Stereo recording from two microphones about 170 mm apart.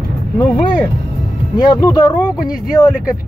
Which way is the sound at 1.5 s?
25° left (ahead or behind).